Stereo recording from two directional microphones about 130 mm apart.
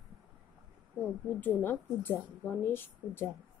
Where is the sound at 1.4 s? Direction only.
15° left (ahead or behind).